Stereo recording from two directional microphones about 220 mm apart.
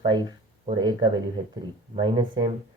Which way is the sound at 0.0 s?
20° right (ahead or behind).